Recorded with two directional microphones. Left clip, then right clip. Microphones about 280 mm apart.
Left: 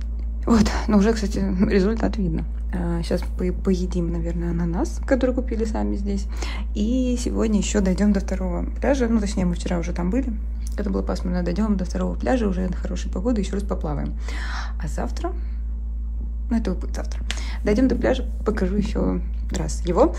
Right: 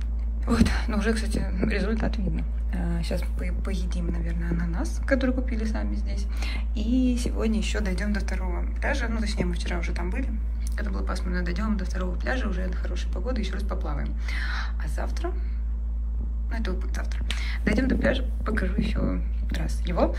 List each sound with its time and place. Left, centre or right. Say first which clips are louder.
0.5 s speech: left 6 dB; left
16.4 s speech: left 8 dB; left